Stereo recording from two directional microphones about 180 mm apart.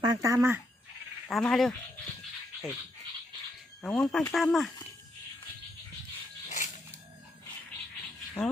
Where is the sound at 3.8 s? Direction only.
5° left (ahead or behind).